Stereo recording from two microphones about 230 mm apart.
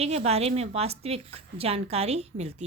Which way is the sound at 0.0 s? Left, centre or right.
Right.